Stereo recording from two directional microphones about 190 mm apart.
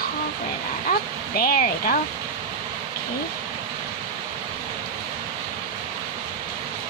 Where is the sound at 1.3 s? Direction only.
50° left (ahead or behind).